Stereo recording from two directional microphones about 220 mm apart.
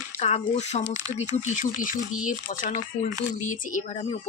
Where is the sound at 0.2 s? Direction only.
25° left (ahead or behind).